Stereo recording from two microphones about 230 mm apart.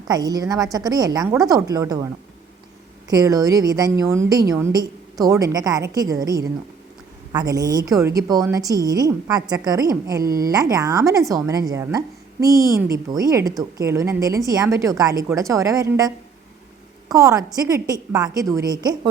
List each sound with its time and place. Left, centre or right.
0.1 s a woman's voice: centre
3.1 s a woman's voice: centre
10.2 s speech: right
10.5 s a woman's voice: centre